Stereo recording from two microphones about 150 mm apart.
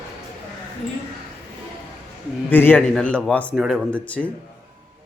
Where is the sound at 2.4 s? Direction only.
15° left (ahead or behind).